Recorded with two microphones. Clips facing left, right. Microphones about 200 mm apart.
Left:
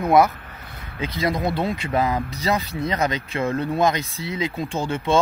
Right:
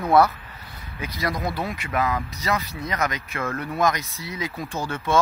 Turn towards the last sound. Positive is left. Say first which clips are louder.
# left 3 dB
turn(degrees=25)  # may be behind; listen again after turning